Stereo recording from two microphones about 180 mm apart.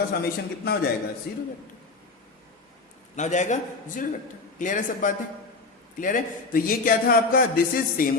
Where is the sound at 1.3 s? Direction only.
65° left (ahead or behind).